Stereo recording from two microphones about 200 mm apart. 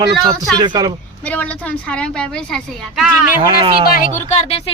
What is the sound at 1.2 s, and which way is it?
A woman's voice, 5° left (ahead or behind).